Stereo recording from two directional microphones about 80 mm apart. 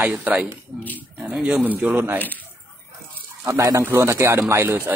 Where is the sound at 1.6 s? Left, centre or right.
Right.